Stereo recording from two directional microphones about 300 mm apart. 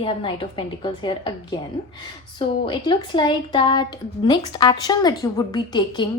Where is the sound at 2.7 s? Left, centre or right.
Centre.